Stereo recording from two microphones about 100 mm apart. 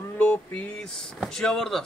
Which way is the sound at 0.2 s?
15° left (ahead or behind).